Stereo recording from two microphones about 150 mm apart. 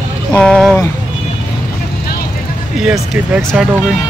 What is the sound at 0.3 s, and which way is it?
Speech, 5° left (ahead or behind).